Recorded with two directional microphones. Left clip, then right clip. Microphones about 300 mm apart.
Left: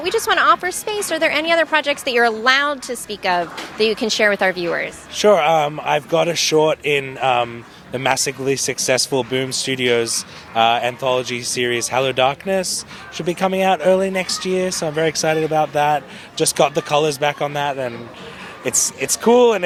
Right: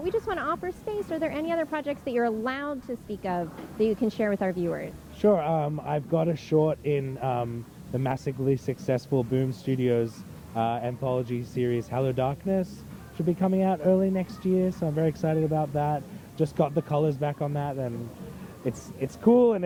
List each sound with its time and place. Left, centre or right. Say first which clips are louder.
0.0 s speech: left 13 dB; centre